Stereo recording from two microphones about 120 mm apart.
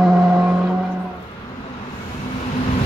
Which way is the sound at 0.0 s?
5° right (ahead or behind).